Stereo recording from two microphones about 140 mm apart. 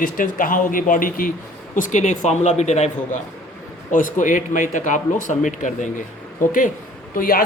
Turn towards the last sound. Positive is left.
turn(degrees=90)